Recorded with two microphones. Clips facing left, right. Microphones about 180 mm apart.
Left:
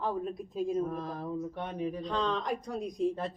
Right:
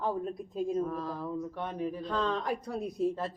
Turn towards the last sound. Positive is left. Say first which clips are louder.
# even
turn(degrees=-5)  # may be behind; listen again after turning